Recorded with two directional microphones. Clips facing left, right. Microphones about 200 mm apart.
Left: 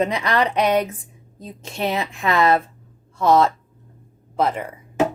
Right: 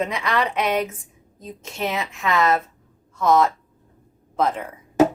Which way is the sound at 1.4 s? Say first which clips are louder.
Left 2 dB; 35° left (ahead or behind).